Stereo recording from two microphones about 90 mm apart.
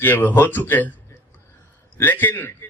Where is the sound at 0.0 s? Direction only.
20° left (ahead or behind).